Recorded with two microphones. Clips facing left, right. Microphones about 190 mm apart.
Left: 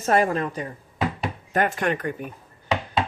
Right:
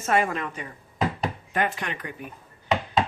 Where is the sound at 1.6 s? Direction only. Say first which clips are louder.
Left 5 dB; 45° left (ahead or behind).